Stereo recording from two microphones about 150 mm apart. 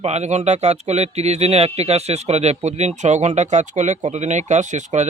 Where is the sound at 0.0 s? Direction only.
50° right (ahead or behind).